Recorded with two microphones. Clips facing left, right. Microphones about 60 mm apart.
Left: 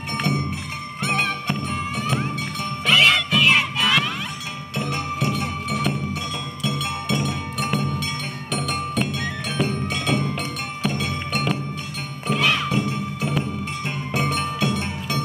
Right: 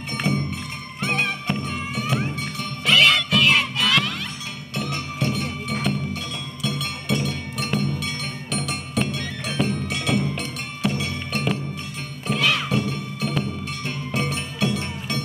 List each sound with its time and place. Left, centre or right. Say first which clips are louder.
0.3 s music: right 2 dB; centre
11.3 s music: even; centre
12.4 s music: left 1 dB; centre
12.9 s music: left 2 dB; centre